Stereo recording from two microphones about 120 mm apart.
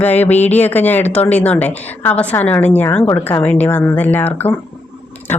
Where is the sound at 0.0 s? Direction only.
15° left (ahead or behind).